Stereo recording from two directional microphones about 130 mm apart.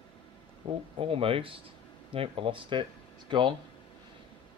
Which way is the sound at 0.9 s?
45° right (ahead or behind).